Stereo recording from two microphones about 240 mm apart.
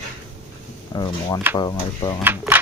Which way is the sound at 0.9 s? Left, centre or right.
Centre.